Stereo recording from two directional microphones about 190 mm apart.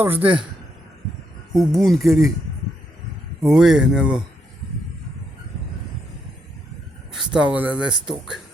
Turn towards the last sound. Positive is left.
turn(degrees=-5)  # may be behind; listen again after turning